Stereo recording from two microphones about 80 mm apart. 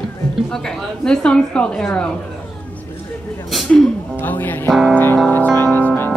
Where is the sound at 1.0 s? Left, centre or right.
Centre.